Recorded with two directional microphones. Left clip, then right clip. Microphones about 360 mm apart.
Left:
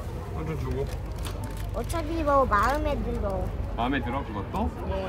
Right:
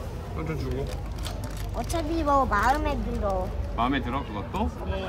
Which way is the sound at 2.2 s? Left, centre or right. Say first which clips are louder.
Left 1 dB; centre.